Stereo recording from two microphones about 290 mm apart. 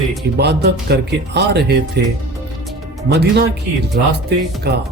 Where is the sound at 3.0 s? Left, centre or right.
Right.